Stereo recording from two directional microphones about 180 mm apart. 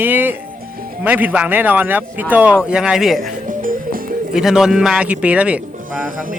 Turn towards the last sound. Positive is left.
turn(degrees=-5)  # may be behind; listen again after turning